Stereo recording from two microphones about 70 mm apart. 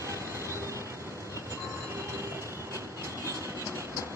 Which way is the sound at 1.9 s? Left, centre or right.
Right.